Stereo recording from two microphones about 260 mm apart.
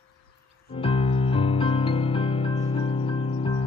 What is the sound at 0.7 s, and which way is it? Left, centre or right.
Music, left.